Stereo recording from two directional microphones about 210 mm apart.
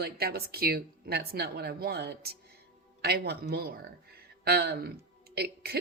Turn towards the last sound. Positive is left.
turn(degrees=-50)  # may be behind; listen again after turning